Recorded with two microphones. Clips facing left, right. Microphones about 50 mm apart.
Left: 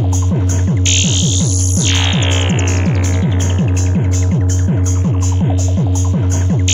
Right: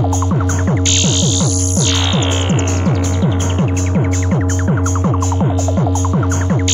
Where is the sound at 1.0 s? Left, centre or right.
Left.